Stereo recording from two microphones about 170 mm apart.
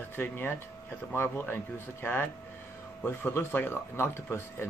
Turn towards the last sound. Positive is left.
turn(degrees=15)  # may be behind; listen again after turning